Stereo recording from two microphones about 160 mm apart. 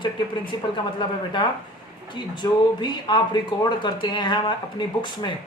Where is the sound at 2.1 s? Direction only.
30° left (ahead or behind).